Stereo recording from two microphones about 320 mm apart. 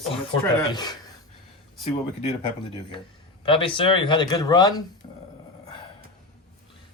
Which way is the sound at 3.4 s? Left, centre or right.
Centre.